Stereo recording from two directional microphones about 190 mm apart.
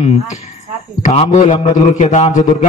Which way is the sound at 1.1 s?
35° left (ahead or behind).